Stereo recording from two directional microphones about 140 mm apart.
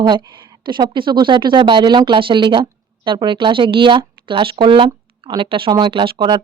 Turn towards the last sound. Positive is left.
turn(degrees=-30)  # may be behind; listen again after turning